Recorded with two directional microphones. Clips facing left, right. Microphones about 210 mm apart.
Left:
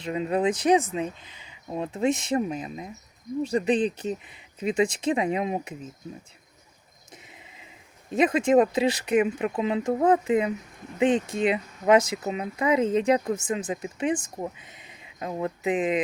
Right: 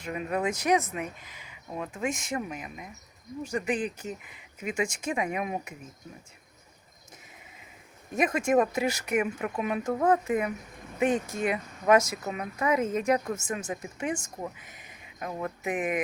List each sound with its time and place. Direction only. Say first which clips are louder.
0.0 s speech: left 5 dB; 25° left (ahead or behind)
8.1 s speech: left 4 dB; 20° left (ahead or behind)
13.3 s speech: left 5 dB; 15° left (ahead or behind)